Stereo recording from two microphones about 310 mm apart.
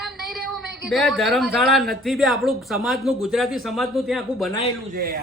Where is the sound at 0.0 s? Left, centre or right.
Centre.